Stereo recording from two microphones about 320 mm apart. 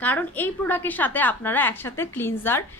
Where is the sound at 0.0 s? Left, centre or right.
Centre.